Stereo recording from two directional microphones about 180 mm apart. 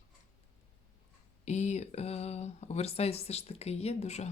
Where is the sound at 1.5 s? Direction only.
40° left (ahead or behind).